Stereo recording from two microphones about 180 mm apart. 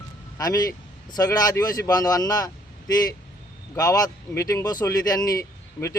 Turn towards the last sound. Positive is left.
turn(degrees=15)  # may be behind; listen again after turning